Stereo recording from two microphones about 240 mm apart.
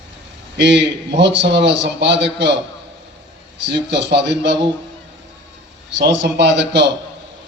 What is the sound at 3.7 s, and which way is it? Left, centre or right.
Speech, right.